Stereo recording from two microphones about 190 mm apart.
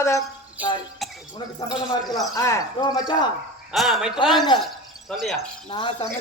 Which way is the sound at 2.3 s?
15° left (ahead or behind).